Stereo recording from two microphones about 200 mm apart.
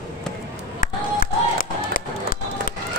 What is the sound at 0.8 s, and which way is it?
Crowd, 45° left (ahead or behind).